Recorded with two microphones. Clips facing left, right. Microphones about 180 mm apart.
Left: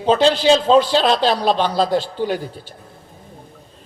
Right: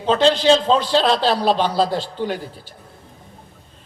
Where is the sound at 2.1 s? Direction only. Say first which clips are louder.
Left 3 dB; 10° left (ahead or behind).